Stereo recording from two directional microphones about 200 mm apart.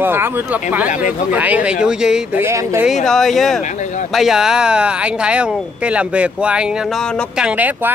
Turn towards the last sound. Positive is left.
turn(degrees=-10)  # may be behind; listen again after turning